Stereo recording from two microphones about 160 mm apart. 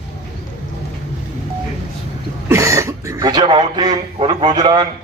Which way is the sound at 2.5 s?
20° right (ahead or behind).